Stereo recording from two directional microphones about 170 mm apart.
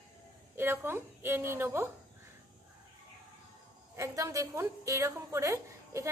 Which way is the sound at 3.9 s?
20° right (ahead or behind).